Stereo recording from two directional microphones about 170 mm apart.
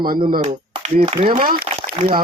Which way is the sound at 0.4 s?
40° right (ahead or behind).